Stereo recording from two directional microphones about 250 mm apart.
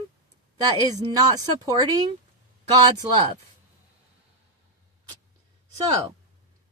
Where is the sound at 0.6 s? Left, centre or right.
Centre.